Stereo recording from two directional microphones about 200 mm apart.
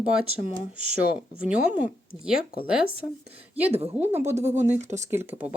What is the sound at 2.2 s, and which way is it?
Speech, 5° right (ahead or behind).